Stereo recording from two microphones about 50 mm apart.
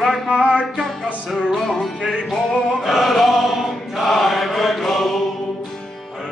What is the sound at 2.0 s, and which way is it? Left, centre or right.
Music, centre.